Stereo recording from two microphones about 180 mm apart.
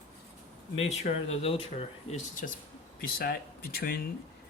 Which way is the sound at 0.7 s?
40° left (ahead or behind).